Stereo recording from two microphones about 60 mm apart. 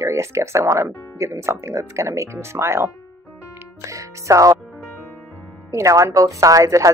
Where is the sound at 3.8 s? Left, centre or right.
Right.